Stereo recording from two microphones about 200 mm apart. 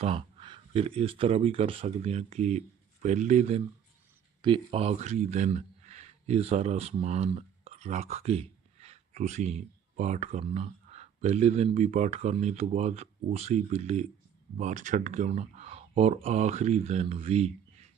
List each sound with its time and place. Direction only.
0.0 s speech: 30° right (ahead or behind)